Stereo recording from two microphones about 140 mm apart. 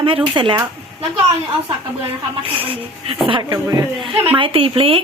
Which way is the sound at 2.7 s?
40° right (ahead or behind).